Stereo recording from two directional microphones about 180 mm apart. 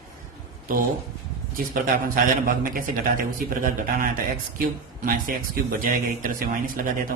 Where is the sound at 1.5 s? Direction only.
50° right (ahead or behind).